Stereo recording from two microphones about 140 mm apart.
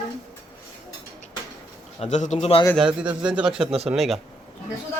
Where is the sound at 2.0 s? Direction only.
55° left (ahead or behind).